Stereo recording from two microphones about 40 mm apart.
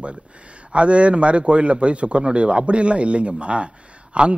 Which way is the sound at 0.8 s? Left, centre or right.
Right.